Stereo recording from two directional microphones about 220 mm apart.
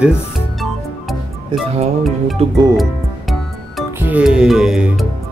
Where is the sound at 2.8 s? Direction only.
Centre (ahead or behind).